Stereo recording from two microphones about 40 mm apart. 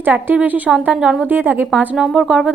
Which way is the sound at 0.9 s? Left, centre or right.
Right.